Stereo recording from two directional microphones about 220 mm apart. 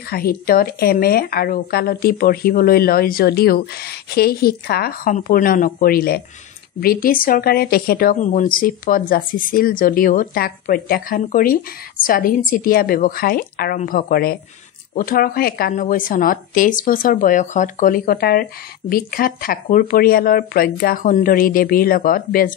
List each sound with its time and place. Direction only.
0.1 s a woman's voice: 45° left (ahead or behind)